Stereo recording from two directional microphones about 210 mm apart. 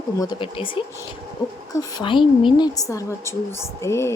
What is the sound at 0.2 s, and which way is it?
A woman's voice, 20° left (ahead or behind).